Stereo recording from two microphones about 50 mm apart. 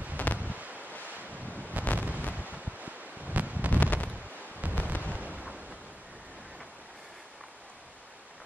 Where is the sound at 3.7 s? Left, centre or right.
Left.